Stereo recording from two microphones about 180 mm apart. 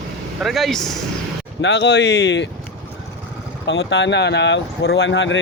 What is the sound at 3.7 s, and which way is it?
Speech, 85° left.